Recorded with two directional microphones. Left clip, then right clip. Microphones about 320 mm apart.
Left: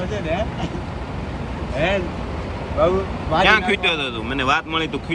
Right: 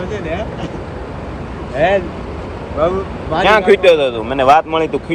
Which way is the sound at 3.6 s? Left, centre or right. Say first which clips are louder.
Right 10 dB; centre.